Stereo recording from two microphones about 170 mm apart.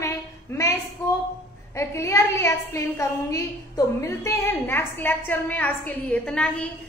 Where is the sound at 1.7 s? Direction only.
15° left (ahead or behind).